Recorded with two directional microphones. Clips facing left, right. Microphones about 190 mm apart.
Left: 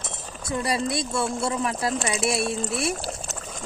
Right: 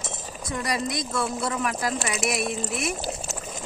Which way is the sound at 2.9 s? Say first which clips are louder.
Right 1 dB; centre (ahead or behind).